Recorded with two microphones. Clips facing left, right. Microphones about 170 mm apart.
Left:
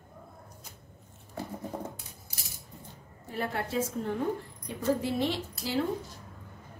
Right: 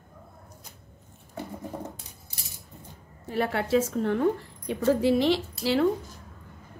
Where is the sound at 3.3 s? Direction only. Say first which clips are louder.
Right 7 dB; 85° right.